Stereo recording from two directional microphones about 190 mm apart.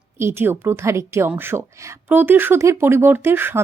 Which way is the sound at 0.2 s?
15° right (ahead or behind).